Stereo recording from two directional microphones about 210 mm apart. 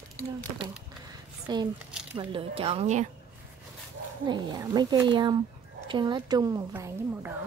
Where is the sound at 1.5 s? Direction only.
20° right (ahead or behind).